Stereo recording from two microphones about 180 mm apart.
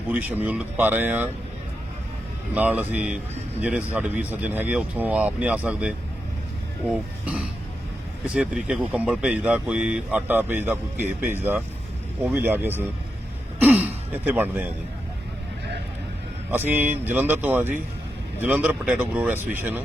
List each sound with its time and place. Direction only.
0.1 s speech: 10° right (ahead or behind)
2.6 s speech: 10° right (ahead or behind)
8.3 s speech: 5° right (ahead or behind)
16.5 s speech: 10° right (ahead or behind)